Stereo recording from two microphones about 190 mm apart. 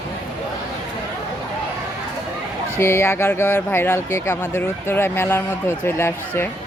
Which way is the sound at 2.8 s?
15° left (ahead or behind).